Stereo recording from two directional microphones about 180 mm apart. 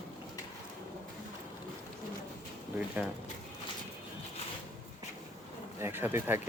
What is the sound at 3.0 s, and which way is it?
Speech, 10° right (ahead or behind).